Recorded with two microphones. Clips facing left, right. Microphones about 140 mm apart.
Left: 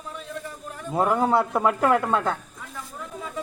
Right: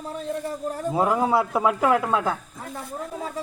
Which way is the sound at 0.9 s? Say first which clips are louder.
Left 1 dB; 5° right (ahead or behind).